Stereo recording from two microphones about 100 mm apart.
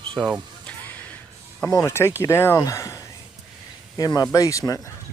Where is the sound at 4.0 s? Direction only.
40° left (ahead or behind).